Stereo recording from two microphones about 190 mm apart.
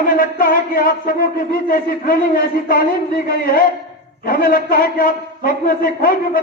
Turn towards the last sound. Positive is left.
turn(degrees=50)  # may be behind; listen again after turning